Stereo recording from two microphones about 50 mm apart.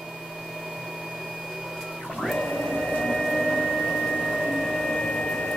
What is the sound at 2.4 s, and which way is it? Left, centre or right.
Printer, centre.